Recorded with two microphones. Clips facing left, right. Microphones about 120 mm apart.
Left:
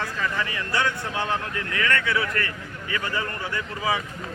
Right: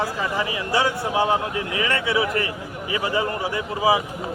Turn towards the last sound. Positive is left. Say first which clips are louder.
# right 6 dB
turn(degrees=-15)  # may be behind; listen again after turning